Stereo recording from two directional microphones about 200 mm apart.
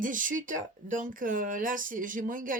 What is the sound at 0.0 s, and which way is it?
Speech, 40° right (ahead or behind).